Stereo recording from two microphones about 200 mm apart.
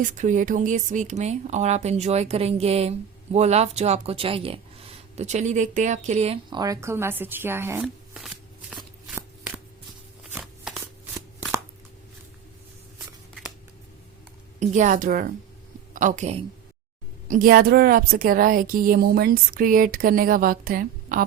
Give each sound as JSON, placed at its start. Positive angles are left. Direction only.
{"t": 0.0, "sound": "speech", "side_deg": -40}
{"t": 6.6, "sound": "speech", "side_deg": -15}
{"t": 10.3, "sound": "a sound", "side_deg": -5}
{"t": 14.6, "sound": "speech", "side_deg": -40}